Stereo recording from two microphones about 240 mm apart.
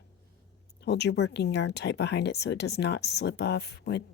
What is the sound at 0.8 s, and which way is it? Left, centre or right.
Speech, left.